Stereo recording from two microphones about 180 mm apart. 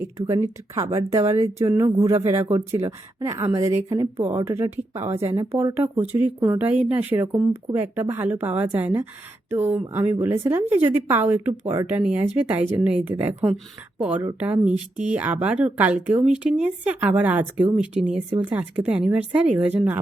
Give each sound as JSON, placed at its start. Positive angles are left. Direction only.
{"t": 0.2, "sound": "speech", "side_deg": -15}